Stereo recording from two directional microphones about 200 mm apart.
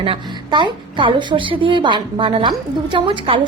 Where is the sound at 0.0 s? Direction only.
25° right (ahead or behind).